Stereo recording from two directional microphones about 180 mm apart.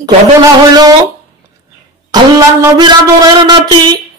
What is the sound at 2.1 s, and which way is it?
A woman's voice, 25° right (ahead or behind).